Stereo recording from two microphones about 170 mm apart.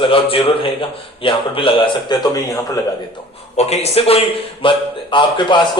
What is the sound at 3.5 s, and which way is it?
A man's voice, 40° left (ahead or behind).